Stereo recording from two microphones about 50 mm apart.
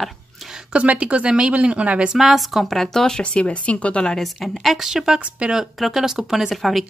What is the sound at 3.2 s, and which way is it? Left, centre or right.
Speech, left.